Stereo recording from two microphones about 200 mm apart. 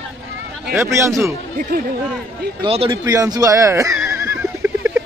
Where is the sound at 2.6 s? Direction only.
25° right (ahead or behind).